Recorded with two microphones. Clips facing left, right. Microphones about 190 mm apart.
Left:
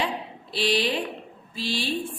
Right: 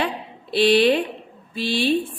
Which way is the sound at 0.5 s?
60° right (ahead or behind).